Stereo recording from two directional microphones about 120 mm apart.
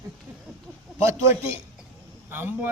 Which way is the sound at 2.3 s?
15° right (ahead or behind).